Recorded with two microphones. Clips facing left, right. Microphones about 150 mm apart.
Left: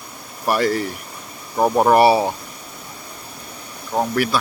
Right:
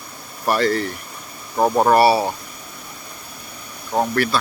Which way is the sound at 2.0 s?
20° left (ahead or behind).